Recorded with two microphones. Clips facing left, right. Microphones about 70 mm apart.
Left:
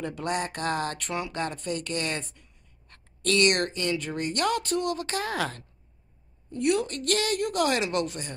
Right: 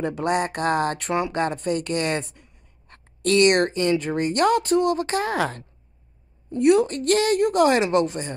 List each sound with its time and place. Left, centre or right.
0.0 s speech: right